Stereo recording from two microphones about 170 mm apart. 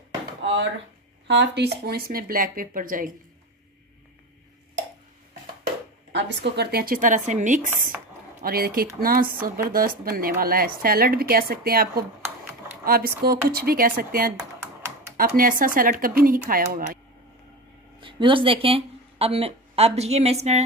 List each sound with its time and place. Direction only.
1.2 s speech: 90° right; by 3.1 s 55° right (ahead or behind)
6.1 s speech: 85° right; by 7.7 s 45° right (ahead or behind)
8.5 s speech: 60° right (ahead or behind)
18.0 s speech: 30° right (ahead or behind)